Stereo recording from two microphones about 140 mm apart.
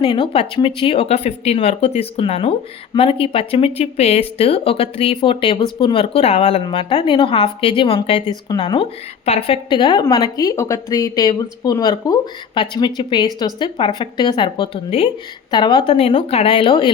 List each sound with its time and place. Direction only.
0.0 s a woman's voice: 35° left (ahead or behind)
8.4 s a woman's voice: 30° left (ahead or behind)
9.2 s speech: 50° left (ahead or behind)
9.6 s a woman's voice: 35° left (ahead or behind)
15.4 s a woman's voice: 30° left (ahead or behind)